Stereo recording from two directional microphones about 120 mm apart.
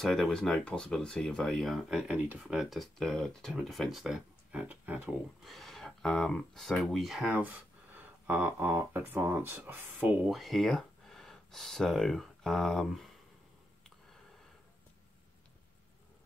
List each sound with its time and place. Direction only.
0.0 s speech: centre (ahead or behind); by 5.1 s 15° right (ahead or behind)
5.4 s speech: centre (ahead or behind); by 10.1 s 15° right (ahead or behind)
10.2 s speech: centre (ahead or behind)